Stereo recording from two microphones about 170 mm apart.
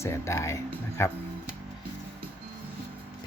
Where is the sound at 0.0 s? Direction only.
15° left (ahead or behind).